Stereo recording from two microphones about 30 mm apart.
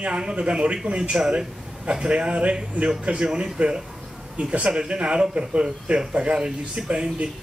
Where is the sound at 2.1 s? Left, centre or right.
Right.